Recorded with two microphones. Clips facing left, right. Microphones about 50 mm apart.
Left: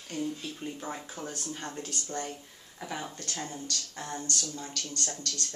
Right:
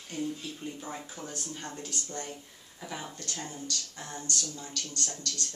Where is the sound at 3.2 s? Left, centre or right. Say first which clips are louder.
Left 1 dB; left.